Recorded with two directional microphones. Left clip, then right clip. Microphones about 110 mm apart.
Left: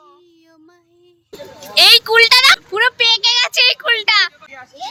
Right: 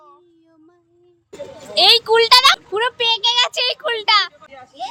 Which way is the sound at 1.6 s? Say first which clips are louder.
Left 4 dB; 10° right (ahead or behind).